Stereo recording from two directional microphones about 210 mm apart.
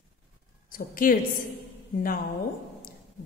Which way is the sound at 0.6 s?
40° left (ahead or behind).